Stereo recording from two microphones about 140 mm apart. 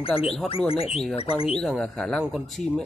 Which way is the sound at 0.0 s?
45° left (ahead or behind).